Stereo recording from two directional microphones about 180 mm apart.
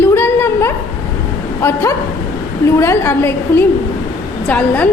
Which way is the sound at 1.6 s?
15° left (ahead or behind).